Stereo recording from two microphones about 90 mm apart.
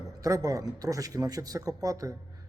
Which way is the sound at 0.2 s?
40° right (ahead or behind).